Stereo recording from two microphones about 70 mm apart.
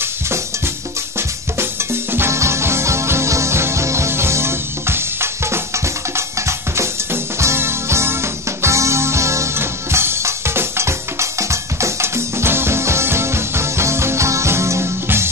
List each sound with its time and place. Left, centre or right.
2.1 s music: right
6.1 s drum: right
7.3 s music: right